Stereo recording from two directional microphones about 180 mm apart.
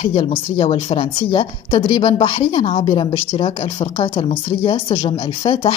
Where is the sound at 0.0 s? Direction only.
35° left (ahead or behind).